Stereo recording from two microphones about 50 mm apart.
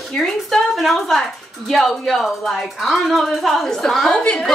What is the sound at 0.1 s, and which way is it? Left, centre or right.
A woman's voice, centre.